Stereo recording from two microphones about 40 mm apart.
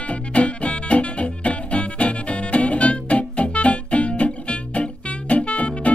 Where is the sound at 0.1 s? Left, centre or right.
Left.